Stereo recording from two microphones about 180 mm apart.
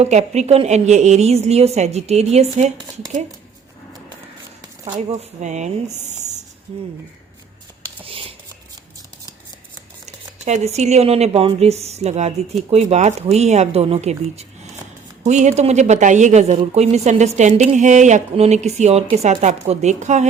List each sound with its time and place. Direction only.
0.0 s speech: 35° right (ahead or behind)
2.7 s speech: 20° right (ahead or behind)
4.9 s speech: 40° right (ahead or behind)
8.0 s whispering: 30° right (ahead or behind)
10.4 s speech: 40° right (ahead or behind)